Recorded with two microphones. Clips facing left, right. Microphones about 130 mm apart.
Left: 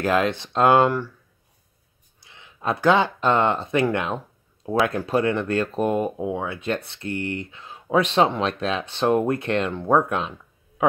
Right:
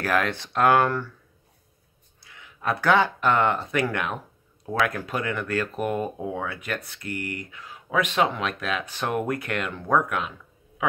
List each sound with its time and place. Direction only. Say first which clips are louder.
0.0 s speech: left 4 dB; 20° left (ahead or behind)
2.1 s speech: even; 25° left (ahead or behind)